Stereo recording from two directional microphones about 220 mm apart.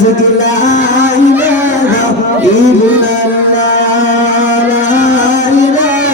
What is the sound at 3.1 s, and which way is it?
Music, 35° left (ahead or behind).